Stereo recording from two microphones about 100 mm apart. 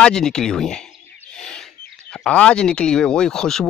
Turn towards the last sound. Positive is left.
turn(degrees=5)  # may be behind; listen again after turning